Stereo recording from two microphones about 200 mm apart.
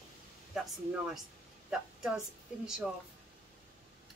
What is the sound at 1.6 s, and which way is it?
Speech, 5° right (ahead or behind).